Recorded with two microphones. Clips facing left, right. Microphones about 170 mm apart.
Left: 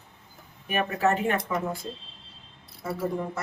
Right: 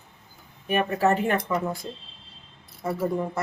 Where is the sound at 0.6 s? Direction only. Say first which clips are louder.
Right 3 dB; 30° right (ahead or behind).